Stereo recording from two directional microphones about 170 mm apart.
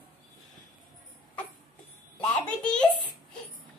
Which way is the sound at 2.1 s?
5° left (ahead or behind).